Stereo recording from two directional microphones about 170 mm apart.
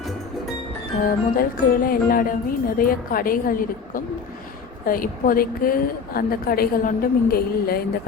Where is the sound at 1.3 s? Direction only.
60° left (ahead or behind).